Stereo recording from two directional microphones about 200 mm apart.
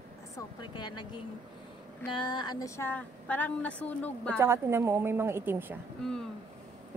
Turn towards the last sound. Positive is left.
turn(degrees=5)  # may be behind; listen again after turning